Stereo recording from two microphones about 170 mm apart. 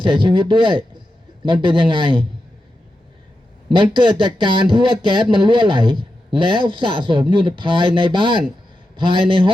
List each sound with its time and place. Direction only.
0.0 s speech: 30° right (ahead or behind)
3.7 s speech: 30° right (ahead or behind)